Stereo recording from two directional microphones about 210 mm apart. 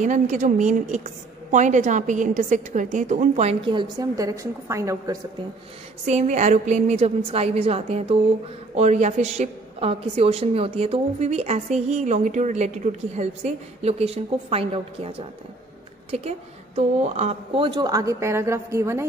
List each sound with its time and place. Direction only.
0.0 s a woman's voice: 35° right (ahead or behind); by 5.2 s 15° right (ahead or behind)
6.0 s a woman's voice: 35° right (ahead or behind); by 19.0 s 15° right (ahead or behind)